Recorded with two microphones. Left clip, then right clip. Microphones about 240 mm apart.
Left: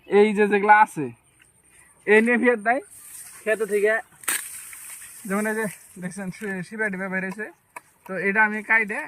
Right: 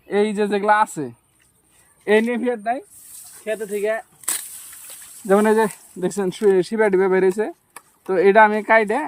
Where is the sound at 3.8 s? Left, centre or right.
Centre.